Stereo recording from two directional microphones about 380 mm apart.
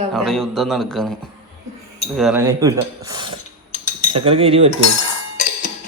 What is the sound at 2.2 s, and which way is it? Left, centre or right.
Speech, centre.